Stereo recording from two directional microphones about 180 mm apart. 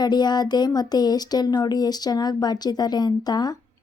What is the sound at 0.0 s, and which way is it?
Speech, 25° left (ahead or behind).